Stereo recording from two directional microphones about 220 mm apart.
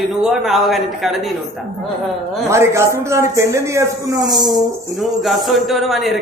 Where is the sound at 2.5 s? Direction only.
10° right (ahead or behind).